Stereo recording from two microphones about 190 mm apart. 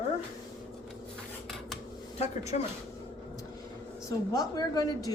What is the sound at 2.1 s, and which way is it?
Speech, 35° left (ahead or behind).